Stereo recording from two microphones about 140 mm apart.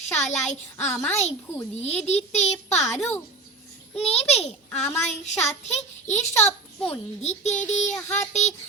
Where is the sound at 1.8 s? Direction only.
50° left (ahead or behind).